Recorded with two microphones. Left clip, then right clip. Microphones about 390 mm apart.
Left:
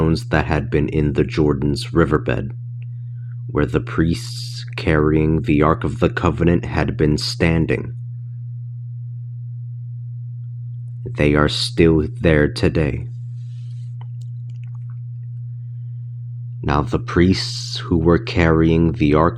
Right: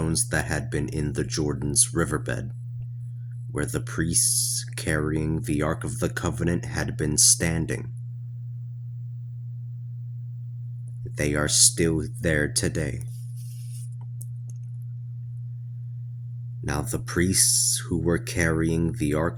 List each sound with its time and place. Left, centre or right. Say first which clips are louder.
0.0 s speech: left 8 dB; right
3.5 s speech: left 10 dB; right
11.0 s speech: left 10 dB; right
16.6 s speech: left 11 dB; right